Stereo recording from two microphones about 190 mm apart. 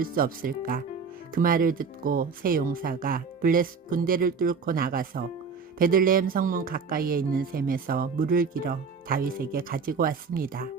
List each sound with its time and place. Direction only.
0.0 s speech: 50° right (ahead or behind)